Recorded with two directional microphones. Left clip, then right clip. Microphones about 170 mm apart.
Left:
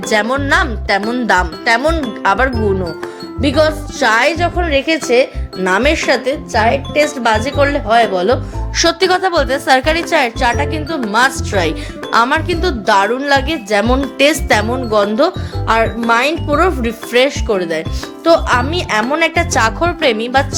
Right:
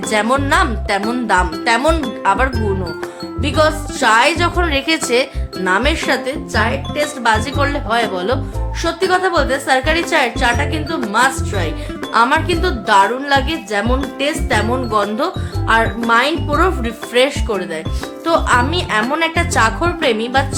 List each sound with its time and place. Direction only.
0.1 s speech: 35° left (ahead or behind)
4.4 s a woman's voice: 10° left (ahead or behind)
5.6 s speech: 25° left (ahead or behind)
8.7 s speech: 55° left (ahead or behind)
14.7 s speech: 35° left (ahead or behind)